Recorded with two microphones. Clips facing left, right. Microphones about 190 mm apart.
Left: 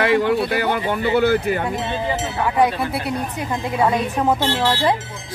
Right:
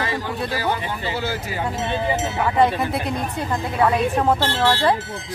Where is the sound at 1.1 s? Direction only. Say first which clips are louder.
Left 10 dB; 60° left (ahead or behind).